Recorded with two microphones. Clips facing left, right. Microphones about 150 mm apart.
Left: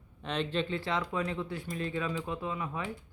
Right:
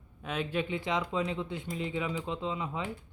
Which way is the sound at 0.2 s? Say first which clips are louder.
Even; 5° right (ahead or behind).